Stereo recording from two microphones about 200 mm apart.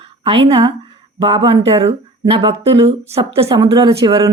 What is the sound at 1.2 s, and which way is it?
A woman's voice, 20° right (ahead or behind).